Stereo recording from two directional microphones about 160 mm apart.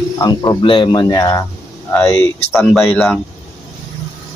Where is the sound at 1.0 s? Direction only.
20° left (ahead or behind).